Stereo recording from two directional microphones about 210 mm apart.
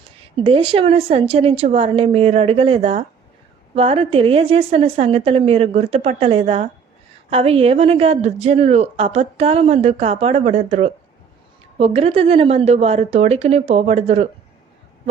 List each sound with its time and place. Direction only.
0.3 s speech: 25° right (ahead or behind)